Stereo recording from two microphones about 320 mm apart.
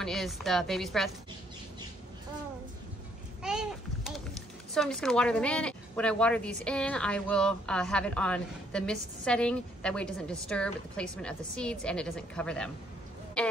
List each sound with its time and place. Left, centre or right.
0.0 s speech: centre
3.4 s a sound: centre
4.7 s speech: centre